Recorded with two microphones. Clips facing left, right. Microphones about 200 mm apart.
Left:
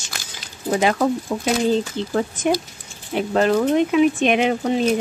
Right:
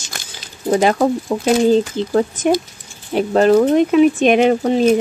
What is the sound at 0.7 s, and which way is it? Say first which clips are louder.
Speech: right 4 dB; 40° right (ahead or behind).